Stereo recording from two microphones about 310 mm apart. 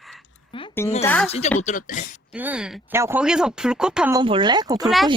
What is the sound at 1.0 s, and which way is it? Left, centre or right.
Speech, centre.